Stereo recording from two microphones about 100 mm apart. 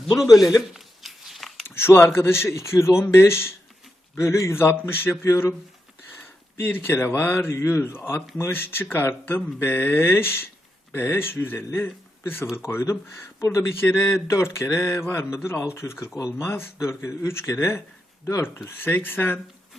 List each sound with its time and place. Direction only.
0.3 s a man's voice: 5° right (ahead or behind)
0.7 s a sound: 5° right (ahead or behind)
1.6 s speech: 25° left (ahead or behind)
6.6 s speech: 20° left (ahead or behind)